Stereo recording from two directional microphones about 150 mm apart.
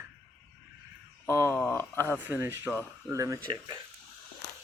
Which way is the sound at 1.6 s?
15° left (ahead or behind).